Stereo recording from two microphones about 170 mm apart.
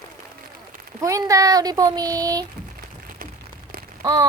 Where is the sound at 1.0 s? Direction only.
20° right (ahead or behind).